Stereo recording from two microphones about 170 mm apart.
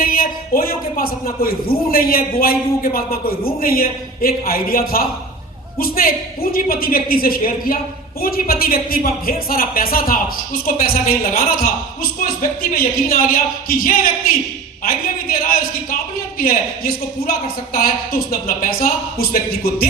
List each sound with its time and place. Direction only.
0.0 s a man's voice: 60° left (ahead or behind)